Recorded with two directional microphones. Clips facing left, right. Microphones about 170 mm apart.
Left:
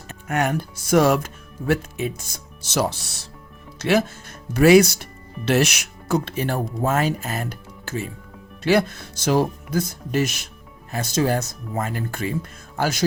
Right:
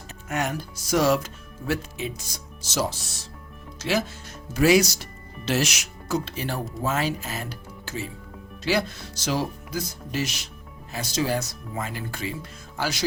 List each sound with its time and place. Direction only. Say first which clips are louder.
0.1 s speech: left 5 dB; 60° left (ahead or behind)